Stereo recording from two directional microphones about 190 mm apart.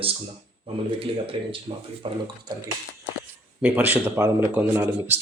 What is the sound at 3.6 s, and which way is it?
Speech, 10° right (ahead or behind).